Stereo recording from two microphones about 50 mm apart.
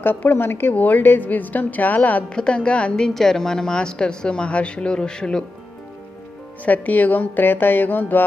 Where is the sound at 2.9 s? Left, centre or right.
Centre.